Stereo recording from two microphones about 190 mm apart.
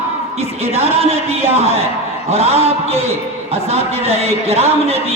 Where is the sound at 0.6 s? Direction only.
30° right (ahead or behind).